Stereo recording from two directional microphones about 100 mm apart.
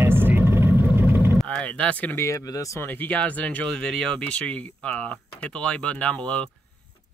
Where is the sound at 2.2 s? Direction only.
35° left (ahead or behind).